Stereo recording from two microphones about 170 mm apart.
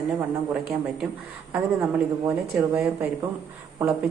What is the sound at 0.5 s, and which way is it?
Speech, 5° right (ahead or behind).